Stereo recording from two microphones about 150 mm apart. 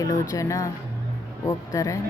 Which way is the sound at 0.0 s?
20° left (ahead or behind).